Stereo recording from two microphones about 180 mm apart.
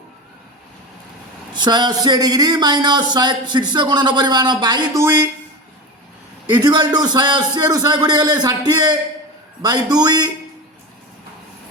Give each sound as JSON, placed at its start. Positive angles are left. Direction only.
{"t": 1.5, "sound": "speech", "side_deg": -25}
{"t": 6.5, "sound": "speech", "side_deg": -25}